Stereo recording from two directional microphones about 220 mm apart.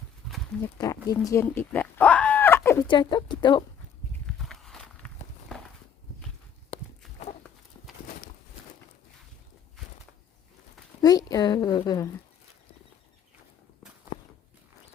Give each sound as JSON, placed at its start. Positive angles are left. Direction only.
{"t": 0.6, "sound": "speech", "side_deg": 15}
{"t": 4.3, "sound": "walk", "side_deg": 0}
{"t": 11.0, "sound": "a woman's voice", "side_deg": 15}